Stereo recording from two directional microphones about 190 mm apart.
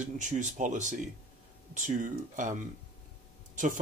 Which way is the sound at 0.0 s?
40° right (ahead or behind).